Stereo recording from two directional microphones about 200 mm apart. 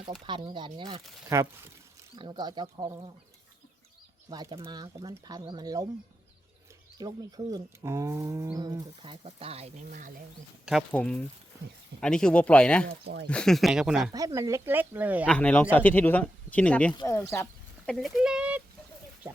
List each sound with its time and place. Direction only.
0.3 s speech: 25° right (ahead or behind)
1.3 s speech: 15° right (ahead or behind)
4.3 s speech: 20° right (ahead or behind)
7.0 s speech: 20° right (ahead or behind); by 10.1 s 40° right (ahead or behind)
10.7 s speech: centre (ahead or behind)
12.9 s speech: 55° right (ahead or behind)
13.2 s speech: 5° left (ahead or behind)
14.1 s speech: 15° right (ahead or behind)
15.3 s speech: 5° left (ahead or behind)
17.9 s speech: centre (ahead or behind)